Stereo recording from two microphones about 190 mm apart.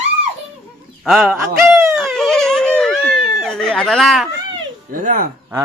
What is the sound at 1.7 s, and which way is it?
Dog, 15° right (ahead or behind).